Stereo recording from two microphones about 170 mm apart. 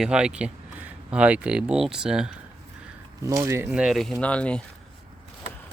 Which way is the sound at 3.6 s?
5° right (ahead or behind).